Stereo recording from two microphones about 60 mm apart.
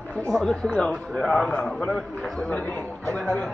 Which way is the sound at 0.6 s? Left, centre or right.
Centre.